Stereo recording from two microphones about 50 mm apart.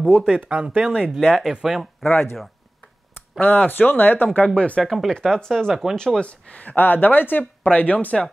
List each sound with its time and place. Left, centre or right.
0.2 s speech: right
1.2 s speech: centre
2.0 s speech: centre
3.3 s speech: left
4.6 s speech: left
4.8 s speech: centre
5.1 s speech: centre; by 8.2 s left